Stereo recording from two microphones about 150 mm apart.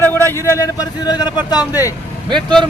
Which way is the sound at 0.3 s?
20° left (ahead or behind).